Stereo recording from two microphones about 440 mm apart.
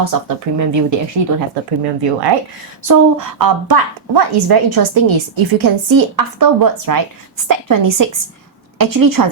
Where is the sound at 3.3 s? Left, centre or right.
Right.